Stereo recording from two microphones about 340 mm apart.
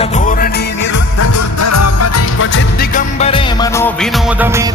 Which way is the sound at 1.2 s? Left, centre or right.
Left.